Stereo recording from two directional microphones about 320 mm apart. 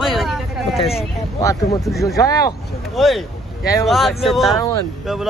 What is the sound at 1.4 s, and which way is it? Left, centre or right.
Speech, centre.